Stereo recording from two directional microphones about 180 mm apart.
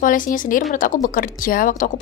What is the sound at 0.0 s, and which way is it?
A woman's voice, 50° left (ahead or behind).